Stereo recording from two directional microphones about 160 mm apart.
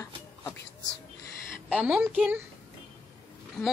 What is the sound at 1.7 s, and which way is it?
Speech, 10° right (ahead or behind).